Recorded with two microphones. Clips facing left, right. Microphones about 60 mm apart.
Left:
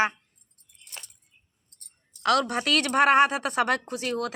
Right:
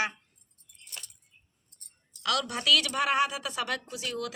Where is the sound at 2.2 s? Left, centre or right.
Left.